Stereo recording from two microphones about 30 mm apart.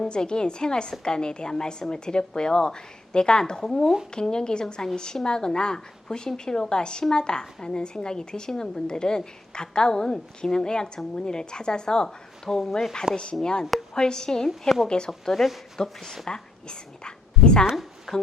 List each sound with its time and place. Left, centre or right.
0.1 s a woman's voice: left
13.1 s speech: right
13.4 s a woman's voice: left
14.8 s a woman's voice: left
18.1 s speech: centre